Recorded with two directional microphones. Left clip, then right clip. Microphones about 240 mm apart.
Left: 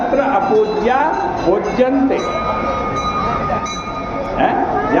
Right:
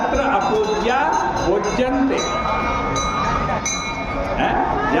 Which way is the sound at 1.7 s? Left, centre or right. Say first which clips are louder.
Left 4 dB; centre.